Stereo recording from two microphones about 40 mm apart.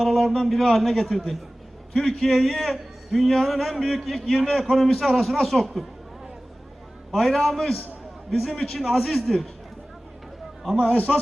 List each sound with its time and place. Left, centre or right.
0.0 s a man's voice: centre
7.1 s a man's voice: centre
8.5 s a man's voice: centre
10.8 s a man's voice: left